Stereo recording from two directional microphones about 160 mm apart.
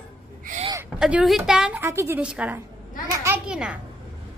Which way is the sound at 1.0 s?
5° right (ahead or behind).